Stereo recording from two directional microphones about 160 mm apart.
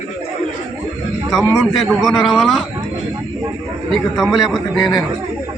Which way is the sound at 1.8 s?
Centre (ahead or behind).